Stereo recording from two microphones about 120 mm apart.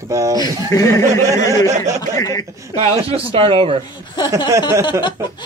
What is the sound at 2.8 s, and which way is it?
A man's voice, 55° right (ahead or behind).